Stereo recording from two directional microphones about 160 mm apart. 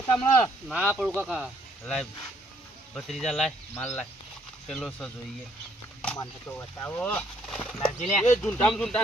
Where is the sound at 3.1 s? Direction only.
Centre (ahead or behind).